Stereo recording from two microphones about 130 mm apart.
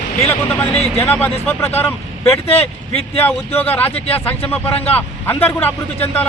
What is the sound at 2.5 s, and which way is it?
Speech, 50° left (ahead or behind).